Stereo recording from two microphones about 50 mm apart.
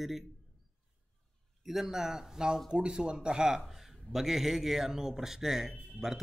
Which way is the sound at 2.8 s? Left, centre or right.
Centre.